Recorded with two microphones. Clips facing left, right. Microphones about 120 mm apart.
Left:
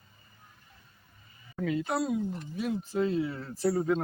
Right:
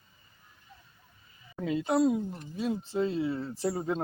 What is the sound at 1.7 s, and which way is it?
Speech, 20° right (ahead or behind).